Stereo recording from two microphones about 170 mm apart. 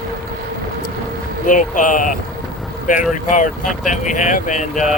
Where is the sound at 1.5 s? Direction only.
50° left (ahead or behind).